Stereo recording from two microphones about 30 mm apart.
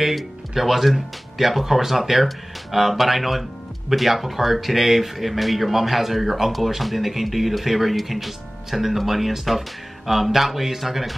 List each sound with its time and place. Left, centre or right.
0.0 s speech: centre